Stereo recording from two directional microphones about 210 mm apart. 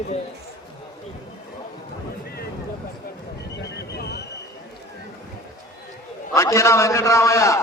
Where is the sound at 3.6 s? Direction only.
55° left (ahead or behind).